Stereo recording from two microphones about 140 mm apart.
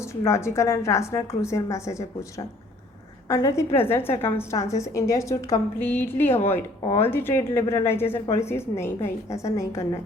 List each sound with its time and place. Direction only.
0.3 s a woman's voice: 20° left (ahead or behind)